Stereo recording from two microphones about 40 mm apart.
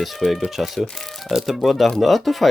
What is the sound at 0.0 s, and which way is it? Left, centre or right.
Speech, centre.